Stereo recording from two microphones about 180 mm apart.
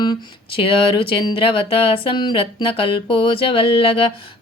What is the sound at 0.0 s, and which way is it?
Speech, 25° left (ahead or behind).